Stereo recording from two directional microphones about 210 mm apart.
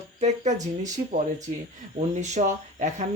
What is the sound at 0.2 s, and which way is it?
Speech, 35° right (ahead or behind).